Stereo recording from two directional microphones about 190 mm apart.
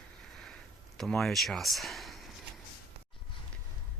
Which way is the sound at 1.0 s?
Centre (ahead or behind).